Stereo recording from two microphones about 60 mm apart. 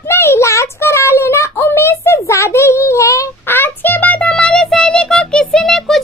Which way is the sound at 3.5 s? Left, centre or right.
Left.